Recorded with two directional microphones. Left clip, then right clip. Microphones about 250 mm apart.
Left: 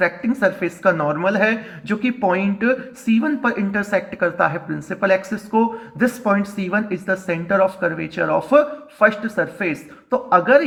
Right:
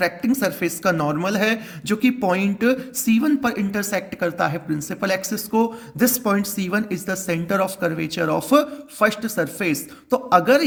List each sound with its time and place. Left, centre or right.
0.3 s speech: right